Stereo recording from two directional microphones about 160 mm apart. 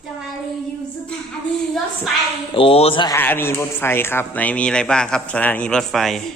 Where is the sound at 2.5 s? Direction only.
35° left (ahead or behind).